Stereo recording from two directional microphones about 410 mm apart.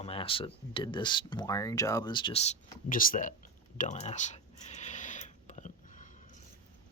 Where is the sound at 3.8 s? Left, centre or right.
Centre.